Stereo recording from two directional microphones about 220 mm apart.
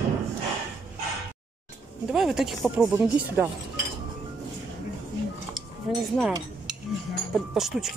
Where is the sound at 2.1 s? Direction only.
Centre (ahead or behind).